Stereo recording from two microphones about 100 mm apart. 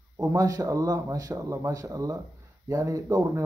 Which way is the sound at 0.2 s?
35° right (ahead or behind).